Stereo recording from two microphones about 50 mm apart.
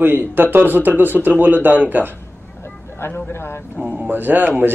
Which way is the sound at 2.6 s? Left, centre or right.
Left.